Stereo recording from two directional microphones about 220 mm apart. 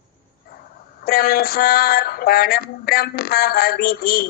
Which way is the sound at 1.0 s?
45° left (ahead or behind).